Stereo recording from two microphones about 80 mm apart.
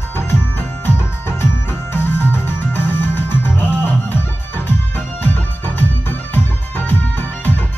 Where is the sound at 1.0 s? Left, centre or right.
Left.